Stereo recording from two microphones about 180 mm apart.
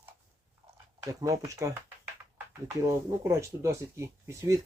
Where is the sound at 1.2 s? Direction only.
20° right (ahead or behind).